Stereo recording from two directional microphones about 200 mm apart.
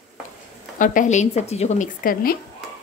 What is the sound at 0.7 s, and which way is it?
Speech, 40° left (ahead or behind).